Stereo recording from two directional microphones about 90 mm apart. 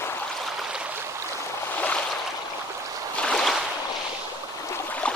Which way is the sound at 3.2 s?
5° left (ahead or behind).